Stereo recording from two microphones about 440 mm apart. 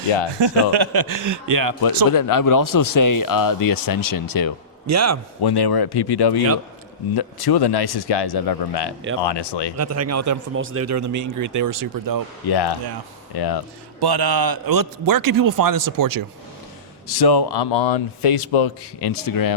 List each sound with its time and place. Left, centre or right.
0.3 s a man's voice: right
2.0 s speech: left
4.9 s speech: right
5.4 s speech: left
9.7 s speech: right
12.5 s speech: left
14.0 s a man's voice: right
17.1 s speech: left
18.5 s a man's voice: left
18.9 s speech: left